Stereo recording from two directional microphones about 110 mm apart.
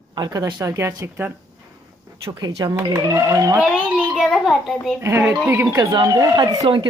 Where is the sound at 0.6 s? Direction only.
30° right (ahead or behind).